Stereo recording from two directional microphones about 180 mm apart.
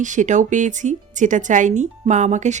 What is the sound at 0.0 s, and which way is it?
Speech, 45° right (ahead or behind).